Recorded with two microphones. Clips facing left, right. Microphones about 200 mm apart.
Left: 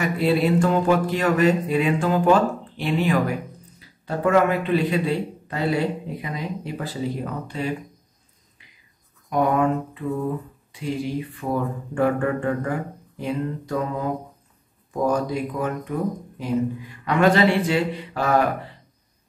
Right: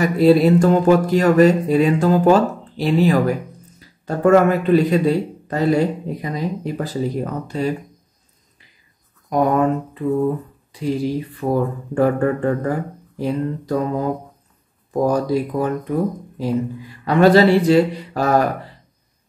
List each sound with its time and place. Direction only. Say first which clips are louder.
0.0 s speech: right 7 dB; 40° right (ahead or behind)
9.3 s speech: right 3 dB; 40° right (ahead or behind)